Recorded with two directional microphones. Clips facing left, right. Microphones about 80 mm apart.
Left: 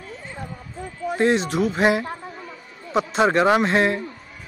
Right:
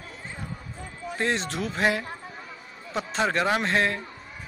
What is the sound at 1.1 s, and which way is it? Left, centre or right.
Speech, centre.